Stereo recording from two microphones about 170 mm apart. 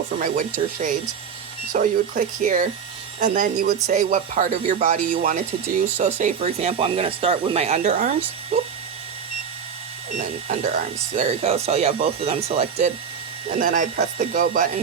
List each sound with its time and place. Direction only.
0.2 s speech: 55° right (ahead or behind)
10.5 s speech: 55° right (ahead or behind)
11.4 s speech: 35° right (ahead or behind)
13.6 s speech: 50° right (ahead or behind)